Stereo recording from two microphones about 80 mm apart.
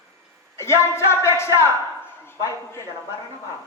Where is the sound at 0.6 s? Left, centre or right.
Left.